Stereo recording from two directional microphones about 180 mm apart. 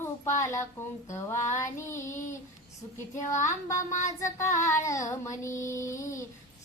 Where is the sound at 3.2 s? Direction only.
40° left (ahead or behind).